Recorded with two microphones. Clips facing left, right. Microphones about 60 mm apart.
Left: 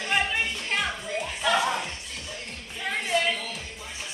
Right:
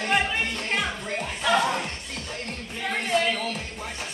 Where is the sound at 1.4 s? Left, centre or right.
Centre.